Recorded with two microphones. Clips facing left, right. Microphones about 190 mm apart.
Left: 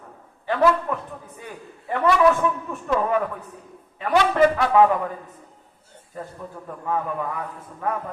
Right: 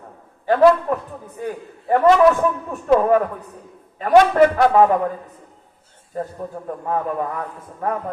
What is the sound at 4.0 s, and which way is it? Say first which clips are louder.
Speech: right 5 dB; 45° right (ahead or behind).